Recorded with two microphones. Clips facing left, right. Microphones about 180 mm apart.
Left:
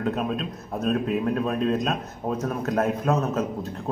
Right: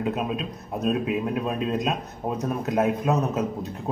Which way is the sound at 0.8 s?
10° right (ahead or behind).